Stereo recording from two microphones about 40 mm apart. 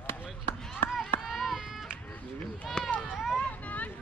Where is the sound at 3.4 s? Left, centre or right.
Left.